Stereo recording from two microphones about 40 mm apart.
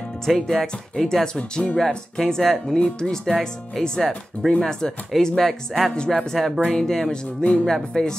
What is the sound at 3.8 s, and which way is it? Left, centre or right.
Speech, centre.